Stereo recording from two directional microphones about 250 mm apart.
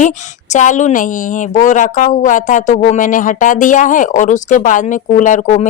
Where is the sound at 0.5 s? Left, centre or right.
Left.